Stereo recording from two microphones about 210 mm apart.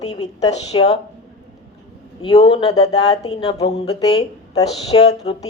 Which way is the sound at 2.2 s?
25° left (ahead or behind).